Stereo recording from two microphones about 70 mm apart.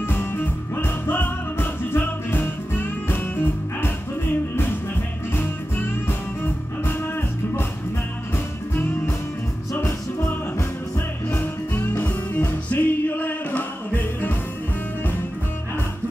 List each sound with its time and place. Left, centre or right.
0.0 s music: left
5.3 s music: left
11.2 s music: left